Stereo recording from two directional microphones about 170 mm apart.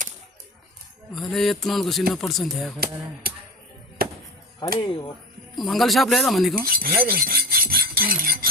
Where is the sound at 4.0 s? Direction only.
60° right (ahead or behind).